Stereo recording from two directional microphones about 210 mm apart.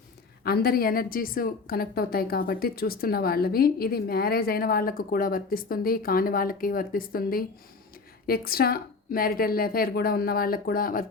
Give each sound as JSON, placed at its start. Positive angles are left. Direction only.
{"t": 0.4, "sound": "a woman's voice", "side_deg": 45}